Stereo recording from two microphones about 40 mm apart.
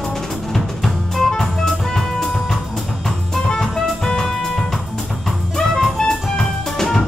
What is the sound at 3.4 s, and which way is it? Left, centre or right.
Music, centre.